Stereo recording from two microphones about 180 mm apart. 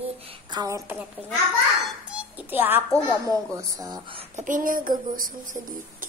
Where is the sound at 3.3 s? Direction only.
20° right (ahead or behind); by 6.1 s 45° right (ahead or behind).